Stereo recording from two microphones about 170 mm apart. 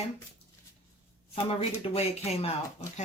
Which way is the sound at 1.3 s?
35° left (ahead or behind).